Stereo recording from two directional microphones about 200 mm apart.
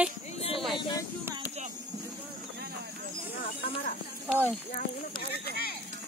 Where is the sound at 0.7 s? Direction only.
20° left (ahead or behind).